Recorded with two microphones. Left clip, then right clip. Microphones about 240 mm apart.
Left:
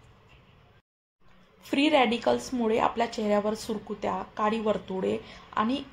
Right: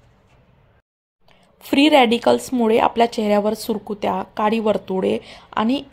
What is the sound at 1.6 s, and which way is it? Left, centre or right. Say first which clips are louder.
Speech: right 9 dB; right.